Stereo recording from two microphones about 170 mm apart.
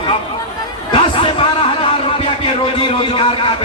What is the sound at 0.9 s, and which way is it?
Chatter, 30° left (ahead or behind).